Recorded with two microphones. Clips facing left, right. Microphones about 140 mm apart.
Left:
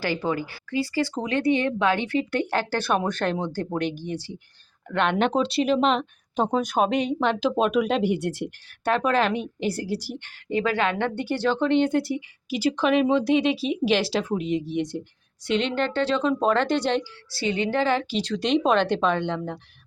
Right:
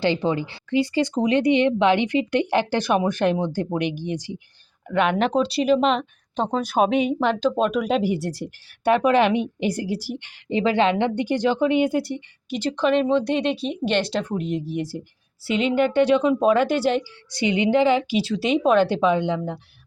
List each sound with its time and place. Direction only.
0.0 s speech: 20° right (ahead or behind); by 7.3 s 5° right (ahead or behind)
7.3 s speech: 5° left (ahead or behind); by 10.3 s 10° right (ahead or behind)
10.5 s speech: 25° right (ahead or behind); by 12.1 s 5° right (ahead or behind)
12.1 s speech: 5° left (ahead or behind); by 19.5 s 10° right (ahead or behind)